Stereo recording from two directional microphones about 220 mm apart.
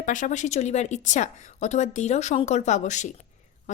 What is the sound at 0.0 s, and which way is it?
A woman's voice, 35° left (ahead or behind).